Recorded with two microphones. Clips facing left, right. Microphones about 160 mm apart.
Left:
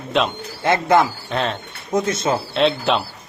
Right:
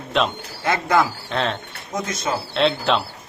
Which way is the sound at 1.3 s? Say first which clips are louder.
Left 1 dB; 5° left (ahead or behind).